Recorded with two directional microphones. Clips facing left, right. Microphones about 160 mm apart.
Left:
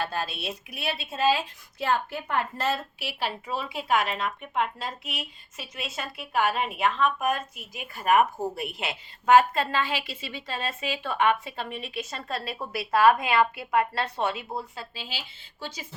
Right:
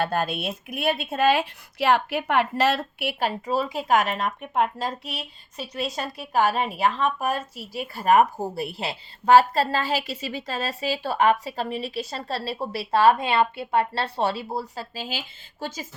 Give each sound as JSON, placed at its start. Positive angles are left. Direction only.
{"t": 0.0, "sound": "speech", "side_deg": -55}